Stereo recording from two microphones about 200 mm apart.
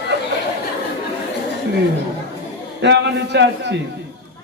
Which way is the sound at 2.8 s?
60° right (ahead or behind).